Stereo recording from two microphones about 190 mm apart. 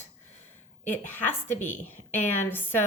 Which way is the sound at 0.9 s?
10° left (ahead or behind).